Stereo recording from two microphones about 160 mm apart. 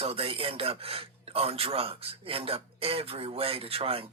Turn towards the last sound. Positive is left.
turn(degrees=-35)  # may be behind; listen again after turning